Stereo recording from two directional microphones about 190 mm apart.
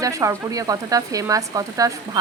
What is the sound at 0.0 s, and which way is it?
Speech, 15° right (ahead or behind).